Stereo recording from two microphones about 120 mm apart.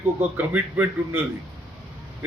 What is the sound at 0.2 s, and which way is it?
A man's voice, 15° right (ahead or behind).